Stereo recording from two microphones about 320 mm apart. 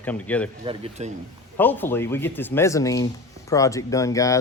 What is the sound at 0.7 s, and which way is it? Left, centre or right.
Speech, centre.